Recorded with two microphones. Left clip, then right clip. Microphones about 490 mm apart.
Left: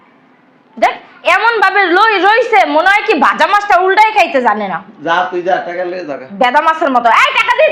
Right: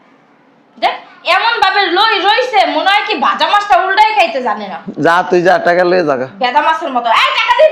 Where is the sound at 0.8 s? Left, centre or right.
Left.